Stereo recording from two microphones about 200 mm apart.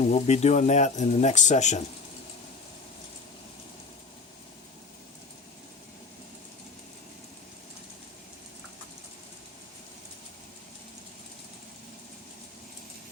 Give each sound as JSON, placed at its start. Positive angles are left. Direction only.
{"t": 0.0, "sound": "speech", "side_deg": 35}